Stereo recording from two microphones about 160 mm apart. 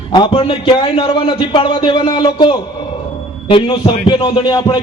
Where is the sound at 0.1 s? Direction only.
30° left (ahead or behind).